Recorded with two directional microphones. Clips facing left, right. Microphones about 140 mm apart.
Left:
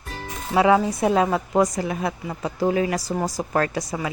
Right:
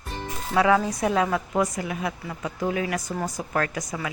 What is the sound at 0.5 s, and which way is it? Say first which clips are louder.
A woman's voice: left 3 dB; 20° left (ahead or behind).